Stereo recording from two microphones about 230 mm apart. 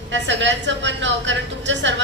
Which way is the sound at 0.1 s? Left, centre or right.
Right.